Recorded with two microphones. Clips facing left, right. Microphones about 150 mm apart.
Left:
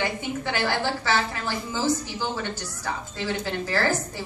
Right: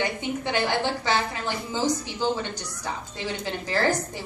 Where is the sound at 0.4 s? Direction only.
20° right (ahead or behind).